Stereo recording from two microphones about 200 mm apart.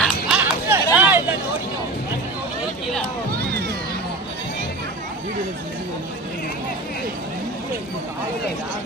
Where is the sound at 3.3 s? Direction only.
50° right (ahead or behind).